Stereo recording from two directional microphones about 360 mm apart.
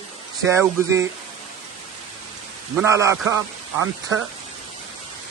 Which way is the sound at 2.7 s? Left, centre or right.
Centre.